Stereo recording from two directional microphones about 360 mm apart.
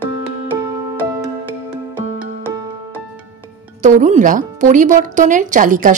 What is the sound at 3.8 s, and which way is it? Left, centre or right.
Speech, centre.